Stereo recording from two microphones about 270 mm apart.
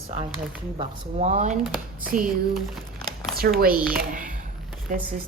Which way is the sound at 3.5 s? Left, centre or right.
Right.